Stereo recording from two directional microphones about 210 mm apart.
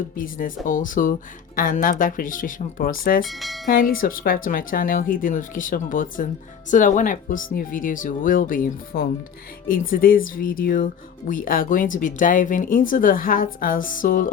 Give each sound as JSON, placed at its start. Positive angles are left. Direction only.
{"t": 0.2, "sound": "speech", "side_deg": 40}
{"t": 3.2, "sound": "speech", "side_deg": 0}
{"t": 3.7, "sound": "speech", "side_deg": 45}